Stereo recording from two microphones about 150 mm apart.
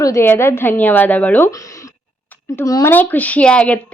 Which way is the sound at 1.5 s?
20° left (ahead or behind).